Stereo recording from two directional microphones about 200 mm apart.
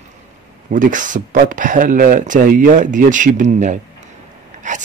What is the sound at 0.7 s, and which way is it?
Speech, 40° right (ahead or behind).